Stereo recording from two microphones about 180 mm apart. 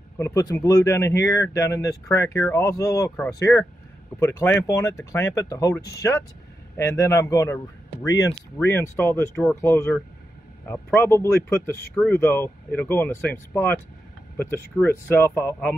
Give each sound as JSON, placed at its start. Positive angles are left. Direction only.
{"t": 0.2, "sound": "speech", "side_deg": 20}